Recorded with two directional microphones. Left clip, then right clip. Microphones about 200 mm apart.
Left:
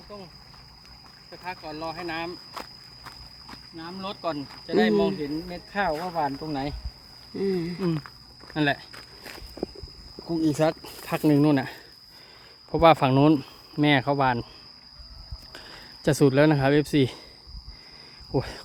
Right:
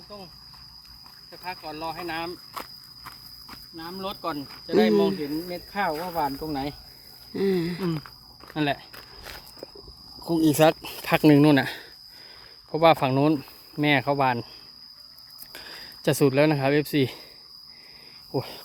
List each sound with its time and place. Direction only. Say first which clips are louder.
1.3 s walk: even; centre (ahead or behind)
3.8 s speech: right 2 dB; 10° left (ahead or behind)
7.3 s a sound: right 3 dB; 20° right (ahead or behind)
8.5 s speech: left 1 dB; 5° left (ahead or behind)
9.0 s walk: even; 10° right (ahead or behind)
10.2 s speech: right 4 dB; 55° right (ahead or behind); by 11.8 s 25° right (ahead or behind)
12.7 s speech: left 1 dB; 10° left (ahead or behind)
15.5 s speech: right 3 dB; centre (ahead or behind)
18.3 s cricket: left 2 dB; 15° left (ahead or behind)